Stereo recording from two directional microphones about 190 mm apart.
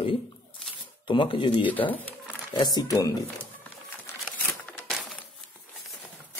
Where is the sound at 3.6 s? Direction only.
10° left (ahead or behind).